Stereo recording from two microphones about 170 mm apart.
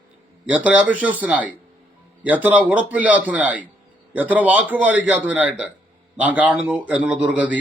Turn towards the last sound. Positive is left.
turn(degrees=-10)  # may be behind; listen again after turning